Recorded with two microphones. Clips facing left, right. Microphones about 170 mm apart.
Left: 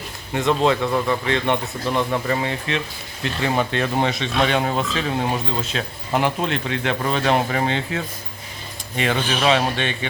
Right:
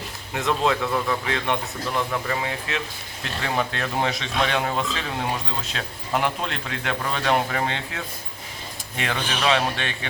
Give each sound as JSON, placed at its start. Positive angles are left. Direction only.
{"t": 0.3, "sound": "a man's voice", "side_deg": 0}
{"t": 0.8, "sound": "speech", "side_deg": 20}
{"t": 1.0, "sound": "a man's voice", "side_deg": 0}